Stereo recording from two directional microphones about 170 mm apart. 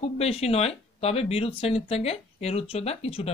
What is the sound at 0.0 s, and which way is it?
Speech, 35° left (ahead or behind).